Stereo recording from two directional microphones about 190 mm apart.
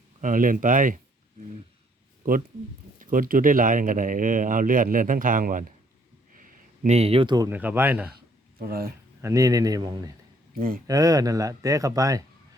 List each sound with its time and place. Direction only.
0.2 s speech: 45° right (ahead or behind)
3.0 s speech: 45° right (ahead or behind)
6.4 s a sound: 35° right (ahead or behind)
7.5 s speech: 10° right (ahead or behind)
8.5 s speech: 55° right (ahead or behind)
9.2 s speech: 15° right (ahead or behind)